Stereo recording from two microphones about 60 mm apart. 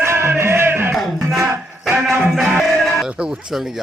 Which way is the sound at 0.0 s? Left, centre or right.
Right.